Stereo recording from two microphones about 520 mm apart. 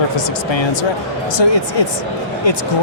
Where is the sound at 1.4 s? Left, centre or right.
Left.